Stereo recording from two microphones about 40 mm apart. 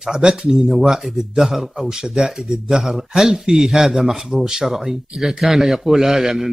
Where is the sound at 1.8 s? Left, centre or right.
Centre.